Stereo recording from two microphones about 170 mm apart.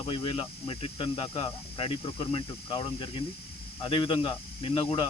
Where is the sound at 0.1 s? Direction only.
30° left (ahead or behind).